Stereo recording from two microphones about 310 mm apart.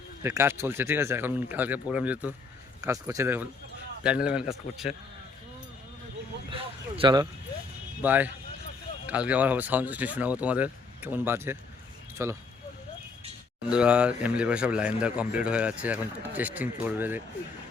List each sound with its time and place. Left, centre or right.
0.2 s speech: centre
6.5 s speech: centre
13.7 s speech: centre